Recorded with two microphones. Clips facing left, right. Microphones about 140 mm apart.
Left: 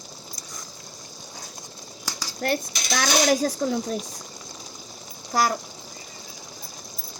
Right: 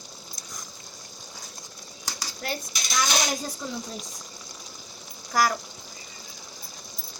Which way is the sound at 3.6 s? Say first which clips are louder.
Left 9 dB; 60° left (ahead or behind).